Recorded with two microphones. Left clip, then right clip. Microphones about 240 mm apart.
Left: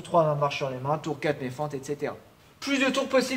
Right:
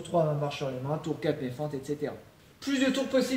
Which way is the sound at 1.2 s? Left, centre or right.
Centre.